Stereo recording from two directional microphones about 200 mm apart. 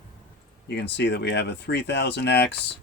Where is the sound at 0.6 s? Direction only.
60° left (ahead or behind).